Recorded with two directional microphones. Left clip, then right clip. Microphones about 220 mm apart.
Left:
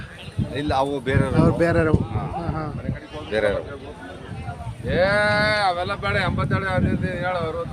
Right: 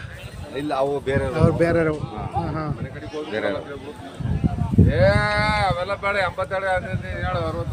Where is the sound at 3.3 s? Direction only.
50° left (ahead or behind).